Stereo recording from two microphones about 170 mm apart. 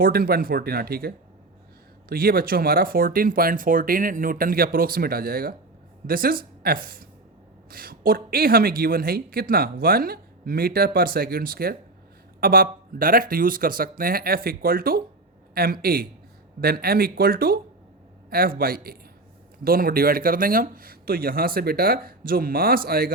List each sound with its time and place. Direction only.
0.0 s speech: 60° right (ahead or behind)